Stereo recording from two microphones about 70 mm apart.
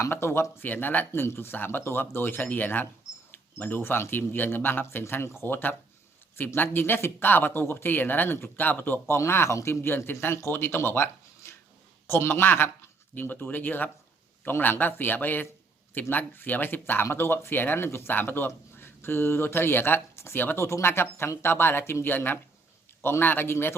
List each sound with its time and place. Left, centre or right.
0.0 s speech: left
0.6 s speech: left
9.1 s speech: left